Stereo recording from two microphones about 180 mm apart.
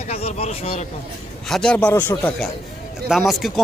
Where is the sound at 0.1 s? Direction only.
35° left (ahead or behind).